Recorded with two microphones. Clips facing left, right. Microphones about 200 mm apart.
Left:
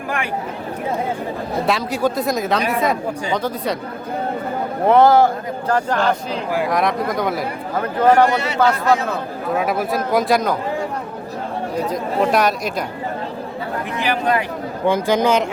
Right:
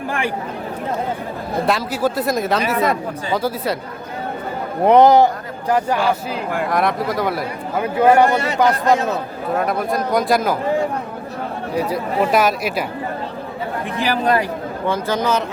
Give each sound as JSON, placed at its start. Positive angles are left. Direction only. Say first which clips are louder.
{"t": 1.5, "sound": "speech", "louder": "right 1 dB", "side_deg": 0}
{"t": 4.9, "sound": "a man's voice", "louder": "right 1 dB", "side_deg": -20}
{"t": 6.5, "sound": "a man's voice", "louder": "left 1 dB", "side_deg": 0}
{"t": 9.6, "sound": "speech", "louder": "even", "side_deg": 5}
{"t": 11.7, "sound": "a man's voice", "louder": "right 2 dB", "side_deg": -10}
{"t": 14.0, "sound": "a man's voice", "louder": "right 2 dB", "side_deg": -35}
{"t": 14.8, "sound": "speech", "louder": "left 4 dB", "side_deg": 15}